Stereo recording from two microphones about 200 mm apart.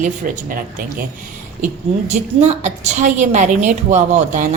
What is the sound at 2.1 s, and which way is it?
A woman's voice, 35° right (ahead or behind).